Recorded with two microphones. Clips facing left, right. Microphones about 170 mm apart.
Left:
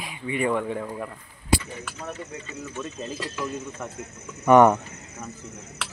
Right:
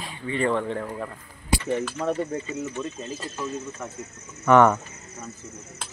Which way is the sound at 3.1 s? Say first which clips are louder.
Left 2 dB; 90° left.